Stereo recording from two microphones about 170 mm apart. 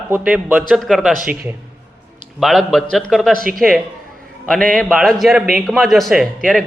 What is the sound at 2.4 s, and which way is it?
Speech, centre (ahead or behind).